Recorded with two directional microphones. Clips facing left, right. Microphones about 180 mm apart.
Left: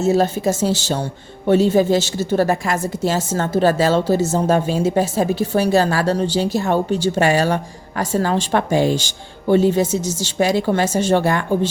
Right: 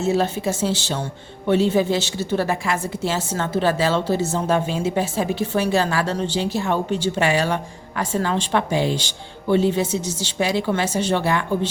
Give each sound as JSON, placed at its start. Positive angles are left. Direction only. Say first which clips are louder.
{"t": 0.0, "sound": "a woman's voice", "louder": "left 4 dB", "side_deg": 40}